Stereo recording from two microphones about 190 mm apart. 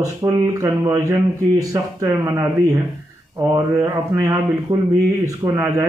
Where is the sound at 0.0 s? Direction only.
15° right (ahead or behind).